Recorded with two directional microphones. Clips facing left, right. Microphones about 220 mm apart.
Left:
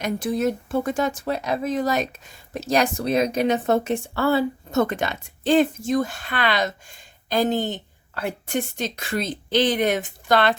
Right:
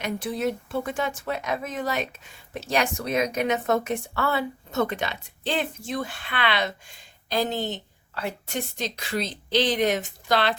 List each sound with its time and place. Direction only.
0.0 s speech: 45° left (ahead or behind)
4.7 s speech: 45° left (ahead or behind)